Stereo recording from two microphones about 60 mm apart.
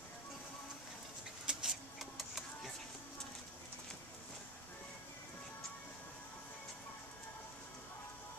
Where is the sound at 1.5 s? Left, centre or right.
Centre.